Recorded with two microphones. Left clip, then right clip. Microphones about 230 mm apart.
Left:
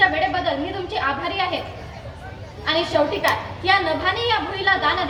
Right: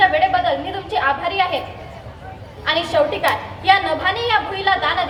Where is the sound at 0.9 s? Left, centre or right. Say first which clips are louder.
Right 6 dB; right.